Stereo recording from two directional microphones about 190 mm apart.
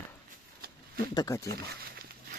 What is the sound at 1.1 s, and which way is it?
Speech, 20° left (ahead or behind).